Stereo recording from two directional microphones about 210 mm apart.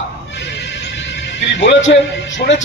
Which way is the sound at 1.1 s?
55° left (ahead or behind).